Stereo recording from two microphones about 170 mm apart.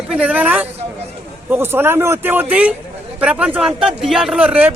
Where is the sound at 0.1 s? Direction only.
10° right (ahead or behind).